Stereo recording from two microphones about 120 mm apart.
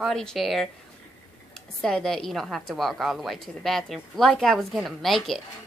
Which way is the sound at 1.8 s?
5° left (ahead or behind).